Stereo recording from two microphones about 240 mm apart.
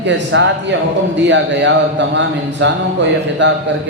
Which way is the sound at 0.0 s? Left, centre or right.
Right.